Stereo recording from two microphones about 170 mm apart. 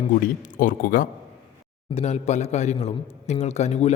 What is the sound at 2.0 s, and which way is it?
A man's voice, 40° left (ahead or behind).